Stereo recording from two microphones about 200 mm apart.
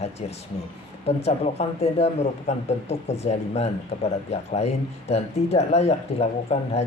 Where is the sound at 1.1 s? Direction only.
30° left (ahead or behind).